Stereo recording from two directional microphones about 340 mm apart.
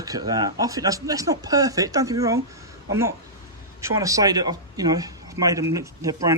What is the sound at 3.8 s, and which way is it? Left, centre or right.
Speech, centre.